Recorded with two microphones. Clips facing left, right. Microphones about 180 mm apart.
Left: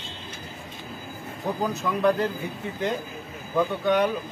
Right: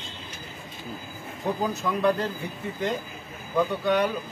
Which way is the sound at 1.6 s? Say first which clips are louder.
Left 2 dB; centre (ahead or behind).